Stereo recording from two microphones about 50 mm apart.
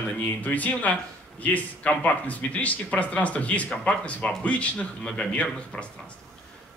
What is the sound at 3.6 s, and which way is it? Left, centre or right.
Speech, centre.